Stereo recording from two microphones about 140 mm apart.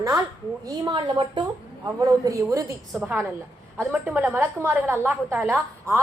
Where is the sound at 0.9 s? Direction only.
35° right (ahead or behind).